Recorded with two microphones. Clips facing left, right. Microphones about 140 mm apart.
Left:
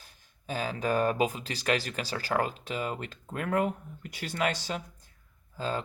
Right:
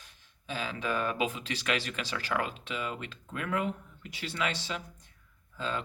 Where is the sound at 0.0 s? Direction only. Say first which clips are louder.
Left 5 dB; 45° left (ahead or behind).